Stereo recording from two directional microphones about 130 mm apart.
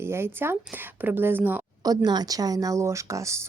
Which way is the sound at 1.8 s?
30° right (ahead or behind).